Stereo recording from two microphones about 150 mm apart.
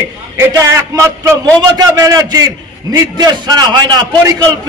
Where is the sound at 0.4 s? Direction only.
20° right (ahead or behind).